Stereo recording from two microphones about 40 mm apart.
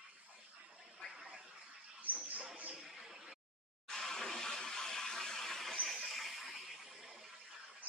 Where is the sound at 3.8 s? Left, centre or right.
Centre.